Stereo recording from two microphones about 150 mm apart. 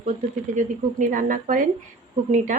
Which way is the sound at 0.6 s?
60° right (ahead or behind).